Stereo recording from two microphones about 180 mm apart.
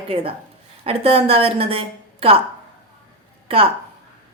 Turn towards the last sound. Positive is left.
turn(degrees=-30)  # may be behind; listen again after turning